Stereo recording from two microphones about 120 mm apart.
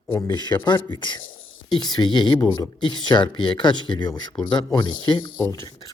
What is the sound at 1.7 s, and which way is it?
Speech, 35° left (ahead or behind).